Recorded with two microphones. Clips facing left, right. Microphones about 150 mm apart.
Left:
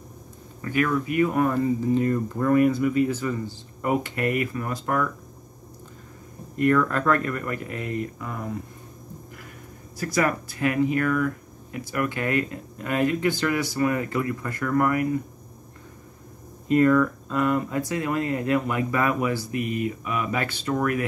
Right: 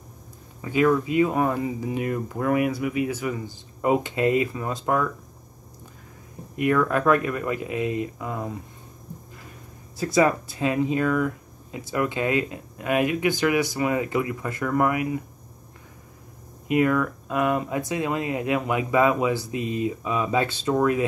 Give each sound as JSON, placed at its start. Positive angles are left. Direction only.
{"t": 0.6, "sound": "speech", "side_deg": -20}
{"t": 6.5, "sound": "speech", "side_deg": -15}
{"t": 9.9, "sound": "speech", "side_deg": -20}
{"t": 16.6, "sound": "speech", "side_deg": -10}